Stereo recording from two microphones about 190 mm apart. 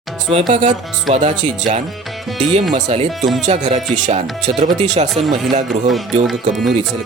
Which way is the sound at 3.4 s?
40° right (ahead or behind).